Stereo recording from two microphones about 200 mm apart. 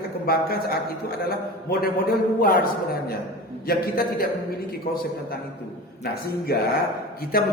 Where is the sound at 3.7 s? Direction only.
50° left (ahead or behind).